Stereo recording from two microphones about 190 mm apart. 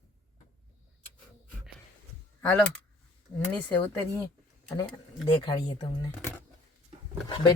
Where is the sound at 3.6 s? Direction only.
25° left (ahead or behind).